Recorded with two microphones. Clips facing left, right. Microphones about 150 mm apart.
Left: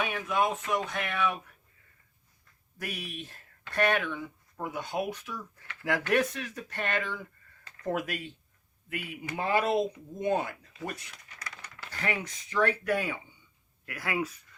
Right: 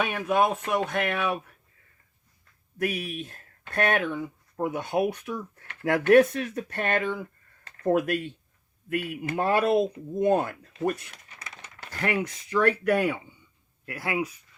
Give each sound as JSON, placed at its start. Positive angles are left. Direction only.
{"t": 0.0, "sound": "speech", "side_deg": -60}
{"t": 2.8, "sound": "speech", "side_deg": -55}
{"t": 4.8, "sound": "speech", "side_deg": -60}
{"t": 11.3, "sound": "a sound", "side_deg": -20}
{"t": 11.8, "sound": "speech", "side_deg": -55}
{"t": 13.8, "sound": "speech", "side_deg": -25}